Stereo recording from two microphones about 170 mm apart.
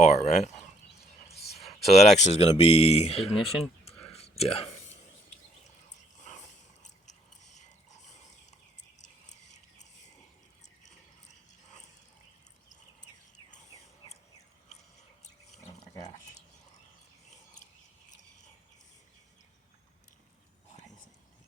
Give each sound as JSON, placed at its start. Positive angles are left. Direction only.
{"t": 0.0, "sound": "speech", "side_deg": 45}
{"t": 1.5, "sound": "a sound", "side_deg": 40}
{"t": 1.9, "sound": "speech", "side_deg": 40}
{"t": 3.2, "sound": "speech", "side_deg": 0}
{"t": 3.8, "sound": "whispering", "side_deg": 35}
{"t": 6.2, "sound": "biting", "side_deg": 45}
{"t": 10.8, "sound": "a sound", "side_deg": 45}